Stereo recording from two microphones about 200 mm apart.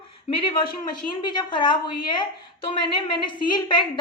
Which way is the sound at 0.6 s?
20° left (ahead or behind).